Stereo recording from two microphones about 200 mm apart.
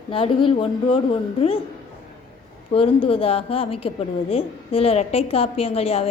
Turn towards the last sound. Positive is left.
turn(degrees=30)  # may be behind; listen again after turning